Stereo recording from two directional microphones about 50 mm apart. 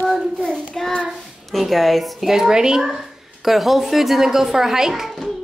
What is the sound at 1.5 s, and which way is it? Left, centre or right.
Speech, centre.